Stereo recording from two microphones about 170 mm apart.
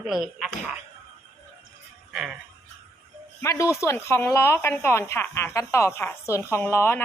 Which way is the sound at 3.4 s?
15° left (ahead or behind).